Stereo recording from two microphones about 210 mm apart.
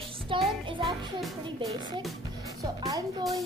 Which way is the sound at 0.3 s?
25° right (ahead or behind).